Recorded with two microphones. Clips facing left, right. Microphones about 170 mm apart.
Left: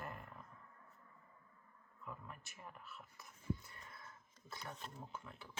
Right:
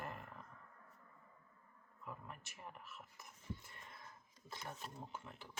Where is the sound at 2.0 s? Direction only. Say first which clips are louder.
Even; 20° right (ahead or behind).